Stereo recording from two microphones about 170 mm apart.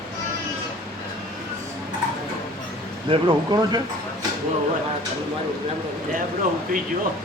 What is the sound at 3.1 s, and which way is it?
Speech, 25° right (ahead or behind).